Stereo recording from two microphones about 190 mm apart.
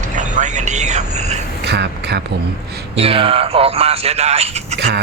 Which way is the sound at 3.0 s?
30° right (ahead or behind).